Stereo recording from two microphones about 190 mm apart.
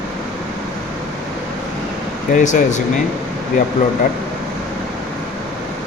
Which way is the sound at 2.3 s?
40° left (ahead or behind).